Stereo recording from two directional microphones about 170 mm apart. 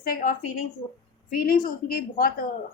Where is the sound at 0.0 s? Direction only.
55° left (ahead or behind).